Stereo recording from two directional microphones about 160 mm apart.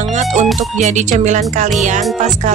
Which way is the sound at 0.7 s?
50° right (ahead or behind).